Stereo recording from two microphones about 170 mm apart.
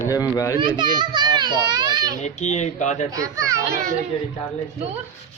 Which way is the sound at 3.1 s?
20° right (ahead or behind).